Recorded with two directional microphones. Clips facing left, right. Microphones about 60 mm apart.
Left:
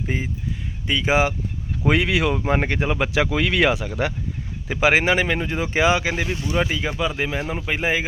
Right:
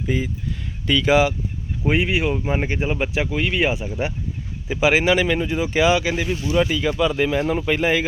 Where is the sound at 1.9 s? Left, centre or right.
Left.